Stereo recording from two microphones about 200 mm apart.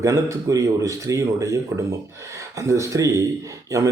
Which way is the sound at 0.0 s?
15° right (ahead or behind).